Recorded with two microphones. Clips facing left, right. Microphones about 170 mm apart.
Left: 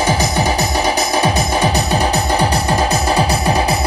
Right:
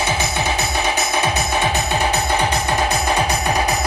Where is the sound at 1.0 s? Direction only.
35° left (ahead or behind).